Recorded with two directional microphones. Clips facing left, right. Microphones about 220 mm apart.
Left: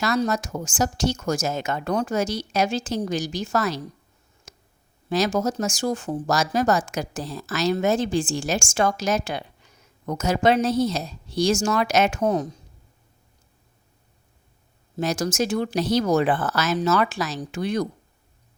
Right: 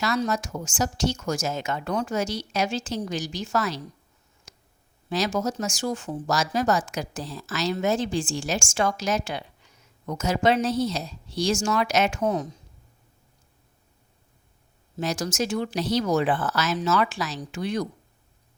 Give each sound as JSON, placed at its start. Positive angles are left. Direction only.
{"t": 0.0, "sound": "speech", "side_deg": 45}
{"t": 5.0, "sound": "speech", "side_deg": 50}
{"t": 14.9, "sound": "speech", "side_deg": 50}